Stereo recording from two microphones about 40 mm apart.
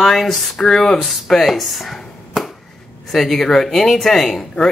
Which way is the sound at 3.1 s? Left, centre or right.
Centre.